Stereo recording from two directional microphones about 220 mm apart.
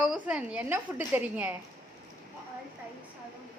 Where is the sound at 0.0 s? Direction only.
5° right (ahead or behind).